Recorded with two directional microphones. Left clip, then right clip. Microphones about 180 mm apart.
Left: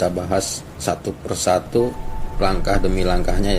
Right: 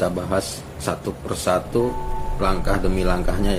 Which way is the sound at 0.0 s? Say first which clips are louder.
Left 2 dB; 15° left (ahead or behind).